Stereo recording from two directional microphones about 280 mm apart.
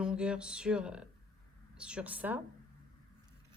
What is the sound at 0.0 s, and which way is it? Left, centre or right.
Speech, centre.